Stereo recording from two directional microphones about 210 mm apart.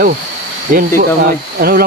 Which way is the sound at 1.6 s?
45° right (ahead or behind).